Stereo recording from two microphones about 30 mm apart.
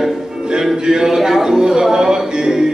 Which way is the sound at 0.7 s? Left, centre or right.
Right.